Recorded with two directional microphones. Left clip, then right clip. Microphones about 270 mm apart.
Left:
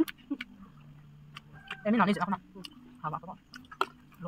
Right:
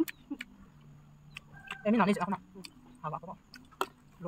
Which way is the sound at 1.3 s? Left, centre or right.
Centre.